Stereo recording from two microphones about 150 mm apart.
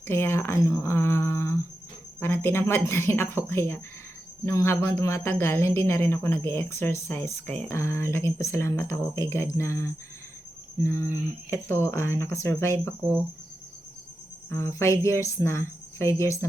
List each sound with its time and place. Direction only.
0.1 s speech: 15° left (ahead or behind)
14.5 s a woman's voice: 15° left (ahead or behind)